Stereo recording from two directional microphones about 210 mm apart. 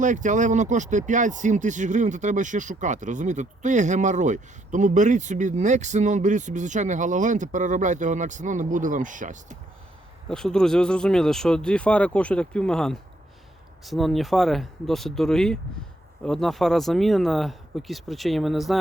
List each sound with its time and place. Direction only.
0.0 s speech: 35° right (ahead or behind)
10.2 s speech: 5° left (ahead or behind)